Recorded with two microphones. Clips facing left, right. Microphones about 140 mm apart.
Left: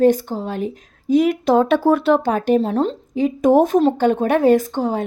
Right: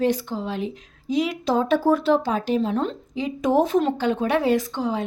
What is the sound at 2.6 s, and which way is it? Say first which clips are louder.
A woman's voice: left 4 dB; 35° left (ahead or behind).